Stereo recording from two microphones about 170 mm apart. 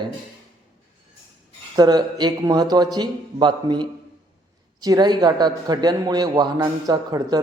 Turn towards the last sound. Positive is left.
turn(degrees=-20)  # may be behind; listen again after turning